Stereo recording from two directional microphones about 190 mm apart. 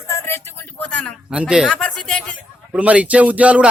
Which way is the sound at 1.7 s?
5° left (ahead or behind).